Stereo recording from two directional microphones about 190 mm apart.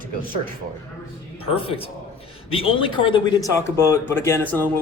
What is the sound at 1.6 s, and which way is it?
A man's voice, 30° left (ahead or behind).